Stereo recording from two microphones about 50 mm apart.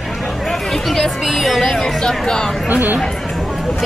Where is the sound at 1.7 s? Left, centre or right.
Centre.